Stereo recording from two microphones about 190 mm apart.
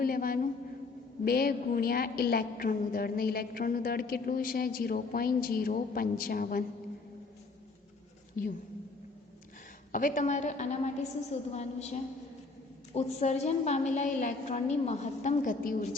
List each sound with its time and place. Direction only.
0.0 s a sound: 50° left (ahead or behind)
1.2 s a woman's voice: 55° left (ahead or behind)
8.4 s a woman's voice: 50° left (ahead or behind)
9.9 s a woman's voice: 45° left (ahead or behind)